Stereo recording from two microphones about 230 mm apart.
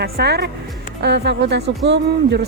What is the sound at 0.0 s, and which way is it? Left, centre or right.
Speech, right.